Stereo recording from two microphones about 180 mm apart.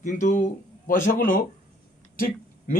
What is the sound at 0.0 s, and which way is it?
A man's voice, 40° left (ahead or behind).